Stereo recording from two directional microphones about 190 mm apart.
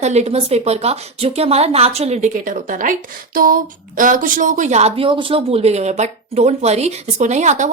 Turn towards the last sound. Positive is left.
turn(degrees=-40)  # may be behind; listen again after turning